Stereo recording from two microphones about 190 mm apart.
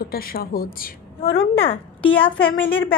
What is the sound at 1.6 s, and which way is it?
Speech, 30° left (ahead or behind).